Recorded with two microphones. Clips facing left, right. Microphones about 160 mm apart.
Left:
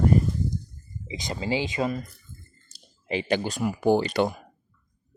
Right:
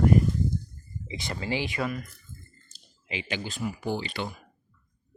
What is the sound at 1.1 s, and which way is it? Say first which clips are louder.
Speech: left 3 dB; 20° left (ahead or behind).